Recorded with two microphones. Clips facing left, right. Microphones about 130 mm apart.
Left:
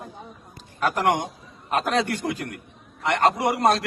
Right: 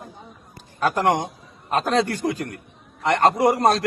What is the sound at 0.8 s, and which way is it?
Speech, 30° right (ahead or behind).